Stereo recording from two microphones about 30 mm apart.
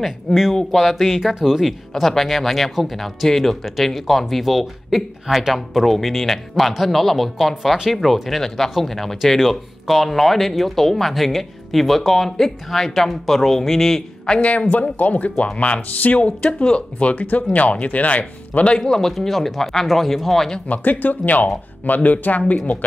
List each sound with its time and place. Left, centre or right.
0.3 s speech: centre
1.7 s speech: centre
14.7 s speech: left
15.4 s speech: left
15.9 s speech: left
18.9 s speech: centre
19.1 s speech: centre
20.6 s speech: left